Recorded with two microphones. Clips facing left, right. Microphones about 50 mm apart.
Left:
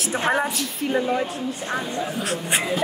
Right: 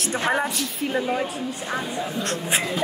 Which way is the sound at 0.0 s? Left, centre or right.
Centre.